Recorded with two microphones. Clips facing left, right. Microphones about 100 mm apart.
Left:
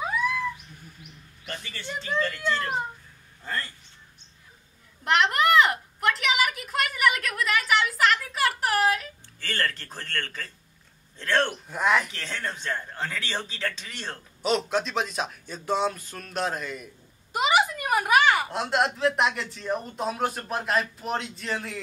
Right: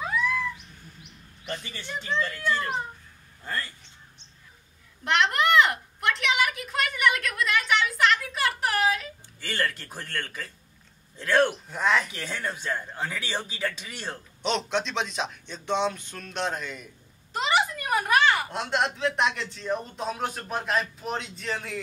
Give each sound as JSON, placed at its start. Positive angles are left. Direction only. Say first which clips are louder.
{"t": 1.5, "sound": "a man's voice", "louder": "right 2 dB", "side_deg": -20}
{"t": 2.1, "sound": "speech", "louder": "left 1 dB", "side_deg": 10}
{"t": 5.0, "sound": "a sound", "louder": "left 1 dB", "side_deg": 0}
{"t": 9.4, "sound": "a man's voice", "louder": "even", "side_deg": -15}
{"t": 11.6, "sound": "speech", "louder": "left 1 dB", "side_deg": 5}
{"t": 12.1, "sound": "a man's voice", "louder": "right 1 dB", "side_deg": -10}
{"t": 14.4, "sound": "speech", "louder": "left 2 dB", "side_deg": 5}